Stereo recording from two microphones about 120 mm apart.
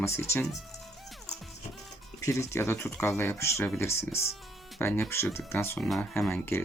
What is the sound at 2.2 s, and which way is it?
Speech, 25° left (ahead or behind).